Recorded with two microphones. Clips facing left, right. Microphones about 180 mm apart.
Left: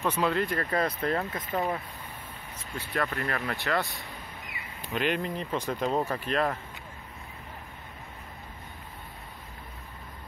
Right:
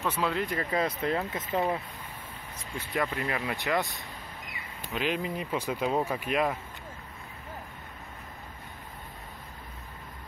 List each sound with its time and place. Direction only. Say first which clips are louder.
0.0 s speech: left 3 dB; 5° right (ahead or behind)
0.5 s speech: left 1 dB; 15° right (ahead or behind)
2.9 s speech: even; 15° right (ahead or behind)
4.9 s speech: left 1 dB; centre (ahead or behind)